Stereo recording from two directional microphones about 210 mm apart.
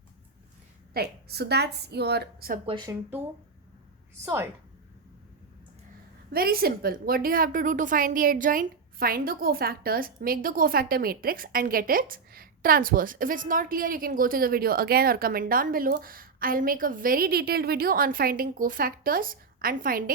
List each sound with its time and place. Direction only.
0.9 s a woman's voice: 50° right (ahead or behind)
2.6 s speech: 20° right (ahead or behind)
6.3 s a woman's voice: 45° right (ahead or behind)